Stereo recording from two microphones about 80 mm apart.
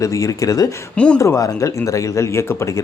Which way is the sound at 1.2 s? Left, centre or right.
Left.